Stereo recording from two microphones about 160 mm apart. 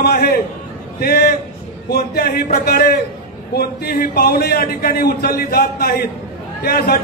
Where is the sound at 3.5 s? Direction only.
70° left (ahead or behind).